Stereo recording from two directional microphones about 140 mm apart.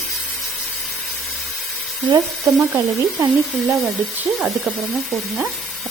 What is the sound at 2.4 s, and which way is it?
Speech, centre (ahead or behind).